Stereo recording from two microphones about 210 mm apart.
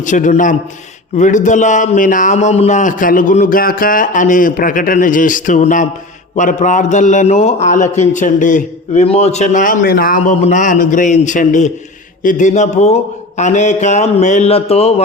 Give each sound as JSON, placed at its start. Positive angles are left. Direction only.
{"t": 0.0, "sound": "a man's voice", "side_deg": 35}